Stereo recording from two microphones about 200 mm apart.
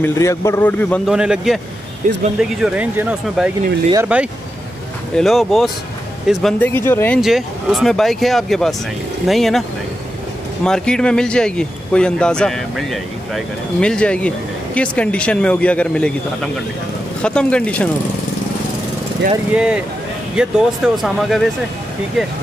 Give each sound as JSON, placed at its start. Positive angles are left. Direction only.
{"t": 0.0, "sound": "a man's voice", "side_deg": 15}
{"t": 1.1, "sound": "speech", "side_deg": -5}
{"t": 2.0, "sound": "speech", "side_deg": -40}
{"t": 2.6, "sound": "a man's voice", "side_deg": -5}
{"t": 7.2, "sound": "speech", "side_deg": 0}
{"t": 17.2, "sound": "speech", "side_deg": 5}
{"t": 19.5, "sound": "speech", "side_deg": -5}